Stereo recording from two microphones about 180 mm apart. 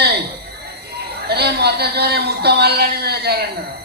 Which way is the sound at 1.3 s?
65° right (ahead or behind).